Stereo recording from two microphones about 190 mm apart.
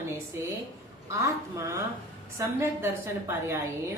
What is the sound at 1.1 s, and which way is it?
A woman's voice, 15° right (ahead or behind).